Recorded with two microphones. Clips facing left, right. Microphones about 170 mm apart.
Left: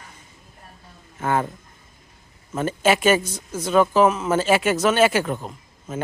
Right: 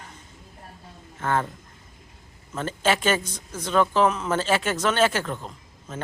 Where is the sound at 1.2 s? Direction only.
10° left (ahead or behind).